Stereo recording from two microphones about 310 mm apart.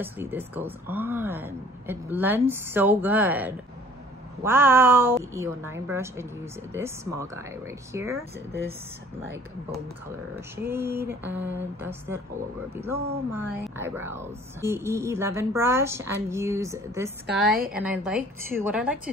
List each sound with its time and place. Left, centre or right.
0.0 s a woman's voice: centre
10.6 s a woman's voice: centre
17.5 s a woman's voice: right
17.8 s a woman's voice: centre